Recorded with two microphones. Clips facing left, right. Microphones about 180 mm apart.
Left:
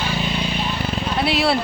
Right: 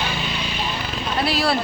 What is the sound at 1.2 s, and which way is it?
Speech, 25° left (ahead or behind).